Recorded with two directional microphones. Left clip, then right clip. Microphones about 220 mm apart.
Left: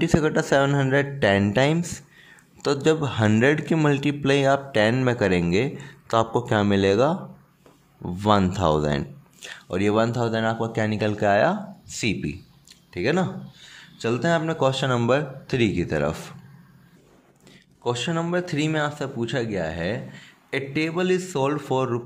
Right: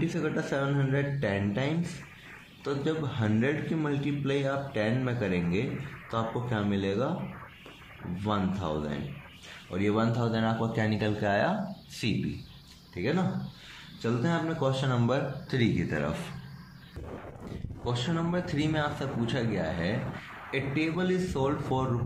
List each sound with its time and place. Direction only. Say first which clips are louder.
0.0 s speech: left 9 dB; 50° left (ahead or behind)
8.5 s speech: left 12 dB; 50° left (ahead or behind); by 12.2 s 30° left (ahead or behind)
12.9 s speech: left 7 dB; 45° left (ahead or behind)
17.8 s speech: left 7 dB; 40° left (ahead or behind)